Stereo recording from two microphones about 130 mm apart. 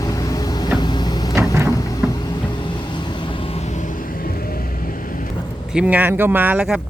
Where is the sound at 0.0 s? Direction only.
25° left (ahead or behind); by 5.3 s 90° left.